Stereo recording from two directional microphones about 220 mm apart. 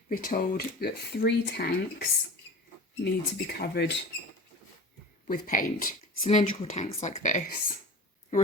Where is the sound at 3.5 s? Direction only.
45° left (ahead or behind).